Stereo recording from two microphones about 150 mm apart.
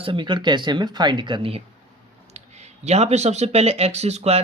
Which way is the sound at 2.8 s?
45° right (ahead or behind).